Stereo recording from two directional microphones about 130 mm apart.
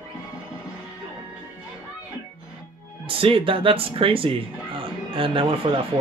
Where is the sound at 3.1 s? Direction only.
45° right (ahead or behind).